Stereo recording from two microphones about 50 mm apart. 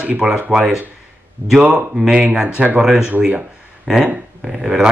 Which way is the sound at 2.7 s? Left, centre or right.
Centre.